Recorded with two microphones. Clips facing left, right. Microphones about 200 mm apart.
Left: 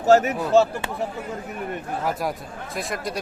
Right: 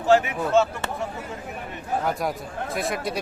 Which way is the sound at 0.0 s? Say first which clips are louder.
Left 3 dB; 40° left (ahead or behind).